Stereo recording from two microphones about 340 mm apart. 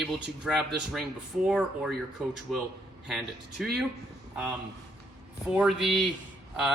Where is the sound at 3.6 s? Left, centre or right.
Centre.